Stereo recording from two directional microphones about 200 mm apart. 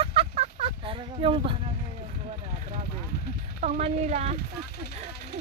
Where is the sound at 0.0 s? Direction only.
30° right (ahead or behind).